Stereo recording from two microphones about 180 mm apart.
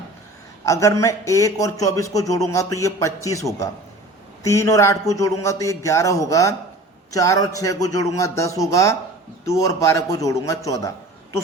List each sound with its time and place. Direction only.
0.6 s a man's voice: 15° left (ahead or behind)